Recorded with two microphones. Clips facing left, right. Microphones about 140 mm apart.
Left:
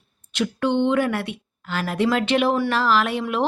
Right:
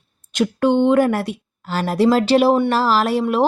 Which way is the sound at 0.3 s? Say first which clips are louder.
Right 5 dB; 45° right (ahead or behind).